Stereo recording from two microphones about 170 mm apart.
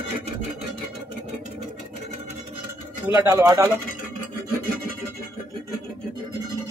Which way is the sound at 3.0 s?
15° right (ahead or behind).